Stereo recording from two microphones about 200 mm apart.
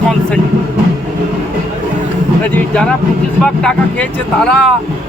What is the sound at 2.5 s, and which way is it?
Speech, 5° left (ahead or behind).